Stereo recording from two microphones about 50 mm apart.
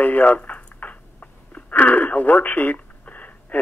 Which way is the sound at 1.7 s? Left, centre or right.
Left.